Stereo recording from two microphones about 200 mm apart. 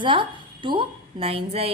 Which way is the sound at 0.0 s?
25° right (ahead or behind).